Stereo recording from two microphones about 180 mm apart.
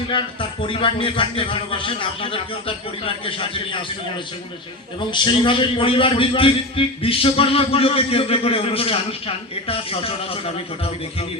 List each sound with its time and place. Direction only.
0.1 s a man's voice: 25° left (ahead or behind)
4.9 s a man's voice: 25° left (ahead or behind)